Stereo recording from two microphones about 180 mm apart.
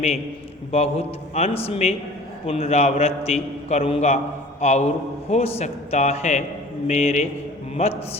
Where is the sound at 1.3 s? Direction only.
35° left (ahead or behind).